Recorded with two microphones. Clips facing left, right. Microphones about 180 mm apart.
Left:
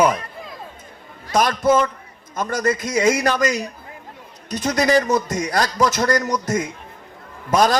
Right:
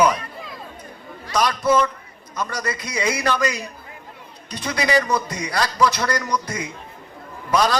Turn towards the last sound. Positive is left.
turn(degrees=45)  # may be behind; listen again after turning